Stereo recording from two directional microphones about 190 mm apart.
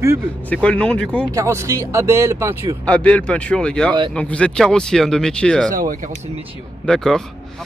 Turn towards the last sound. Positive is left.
turn(degrees=5)  # may be behind; listen again after turning